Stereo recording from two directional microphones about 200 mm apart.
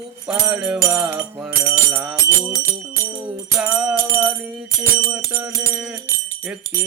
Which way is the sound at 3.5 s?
5° right (ahead or behind).